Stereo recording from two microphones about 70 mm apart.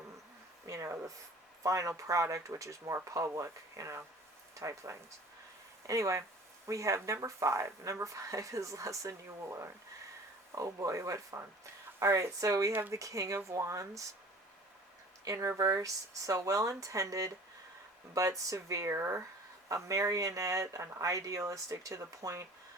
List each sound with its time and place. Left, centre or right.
0.7 s speech: right
10.5 s speech: right
15.2 s speech: right